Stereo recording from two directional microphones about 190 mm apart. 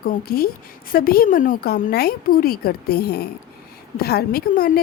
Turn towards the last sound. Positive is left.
turn(degrees=50)  # may be behind; listen again after turning